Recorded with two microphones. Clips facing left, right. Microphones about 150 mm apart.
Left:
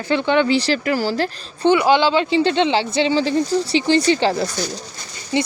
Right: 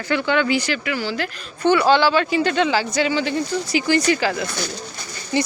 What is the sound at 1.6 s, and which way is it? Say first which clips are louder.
A woman's voice: left 1 dB; 15° left (ahead or behind).